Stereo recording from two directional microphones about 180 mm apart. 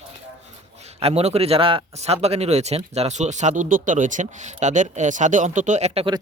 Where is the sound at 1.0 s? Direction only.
35° right (ahead or behind).